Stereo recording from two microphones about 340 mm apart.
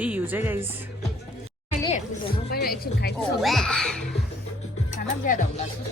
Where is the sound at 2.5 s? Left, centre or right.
Left.